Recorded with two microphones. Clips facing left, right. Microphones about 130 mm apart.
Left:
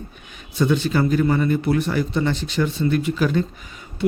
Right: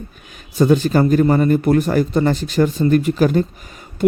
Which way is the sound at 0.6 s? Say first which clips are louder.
Right 5 dB; 40° right (ahead or behind).